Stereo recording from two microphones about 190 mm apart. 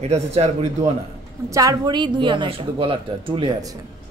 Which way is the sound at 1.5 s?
20° right (ahead or behind).